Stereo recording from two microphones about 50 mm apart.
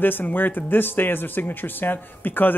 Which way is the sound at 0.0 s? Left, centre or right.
Left.